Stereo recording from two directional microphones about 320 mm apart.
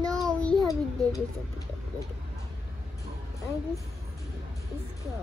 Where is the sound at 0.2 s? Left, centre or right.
Centre.